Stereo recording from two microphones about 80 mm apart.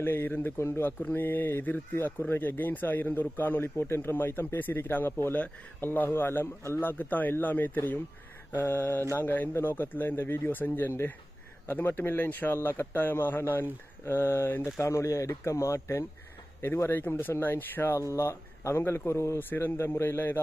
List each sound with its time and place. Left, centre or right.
0.0 s speech: left